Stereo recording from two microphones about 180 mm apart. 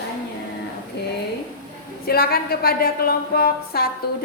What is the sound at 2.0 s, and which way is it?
A woman's voice, 55° left (ahead or behind).